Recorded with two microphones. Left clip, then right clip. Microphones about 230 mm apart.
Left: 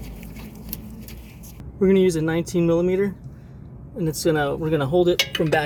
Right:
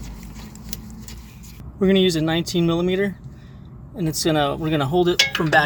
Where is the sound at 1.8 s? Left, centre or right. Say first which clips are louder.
Even; right.